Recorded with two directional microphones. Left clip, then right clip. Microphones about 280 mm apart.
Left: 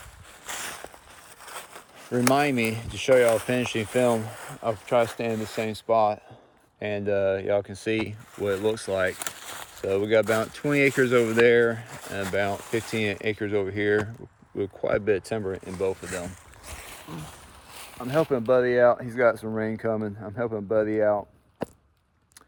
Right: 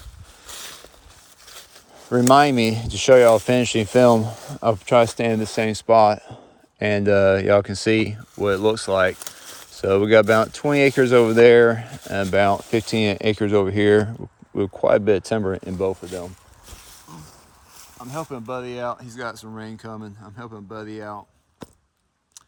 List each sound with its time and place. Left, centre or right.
2.5 s speech: right
2.7 s speech: right
18.0 s speech: right
18.9 s speech: right